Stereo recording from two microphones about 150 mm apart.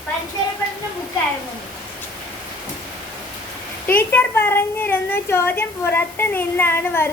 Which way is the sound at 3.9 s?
10° left (ahead or behind).